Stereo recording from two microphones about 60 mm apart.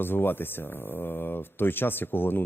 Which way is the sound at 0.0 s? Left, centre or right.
Left.